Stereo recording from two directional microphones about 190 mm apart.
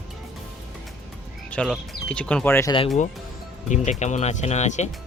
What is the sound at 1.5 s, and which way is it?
Speech, 5° left (ahead or behind).